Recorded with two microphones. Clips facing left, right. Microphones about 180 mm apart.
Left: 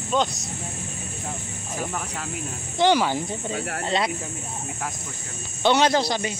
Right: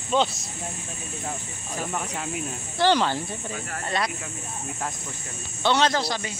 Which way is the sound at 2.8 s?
10° left (ahead or behind).